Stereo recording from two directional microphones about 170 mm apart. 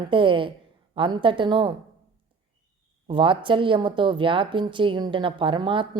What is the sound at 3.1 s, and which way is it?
A woman's voice, 30° right (ahead or behind).